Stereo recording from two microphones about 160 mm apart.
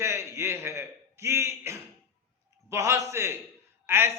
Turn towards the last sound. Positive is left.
turn(degrees=-15)  # may be behind; listen again after turning